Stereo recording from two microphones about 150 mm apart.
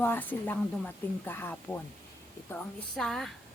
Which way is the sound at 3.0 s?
5° left (ahead or behind).